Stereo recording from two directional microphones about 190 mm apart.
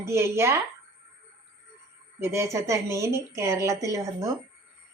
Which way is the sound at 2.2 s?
15° right (ahead or behind).